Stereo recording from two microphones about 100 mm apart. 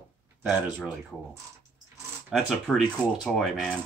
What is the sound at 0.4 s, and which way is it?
Speech, 15° right (ahead or behind).